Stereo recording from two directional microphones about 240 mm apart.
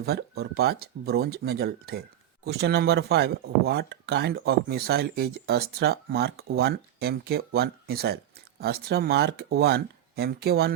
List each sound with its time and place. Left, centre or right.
0.0 s speech: right